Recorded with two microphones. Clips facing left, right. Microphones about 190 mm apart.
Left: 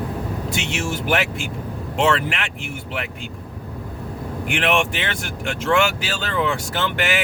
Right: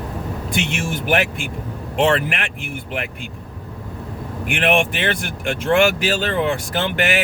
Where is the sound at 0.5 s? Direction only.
15° right (ahead or behind).